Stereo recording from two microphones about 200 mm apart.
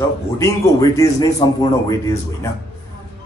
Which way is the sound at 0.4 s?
15° left (ahead or behind).